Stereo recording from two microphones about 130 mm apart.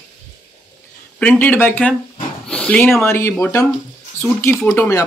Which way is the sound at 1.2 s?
15° left (ahead or behind).